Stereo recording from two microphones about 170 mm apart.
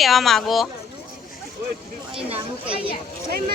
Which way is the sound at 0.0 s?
Centre (ahead or behind).